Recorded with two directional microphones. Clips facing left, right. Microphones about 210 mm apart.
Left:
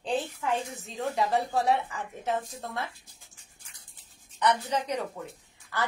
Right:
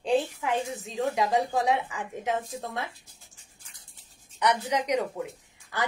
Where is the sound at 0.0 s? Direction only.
15° right (ahead or behind).